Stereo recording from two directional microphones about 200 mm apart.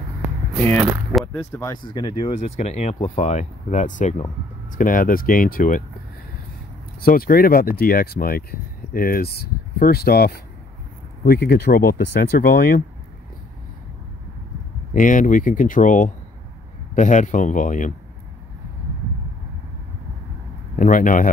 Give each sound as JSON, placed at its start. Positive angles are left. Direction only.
{"t": 0.7, "sound": "speech", "side_deg": 0}
{"t": 1.2, "sound": "speech", "side_deg": 15}
{"t": 7.0, "sound": "speech", "side_deg": 45}
{"t": 15.0, "sound": "speech", "side_deg": 40}
{"t": 20.7, "sound": "speech", "side_deg": 40}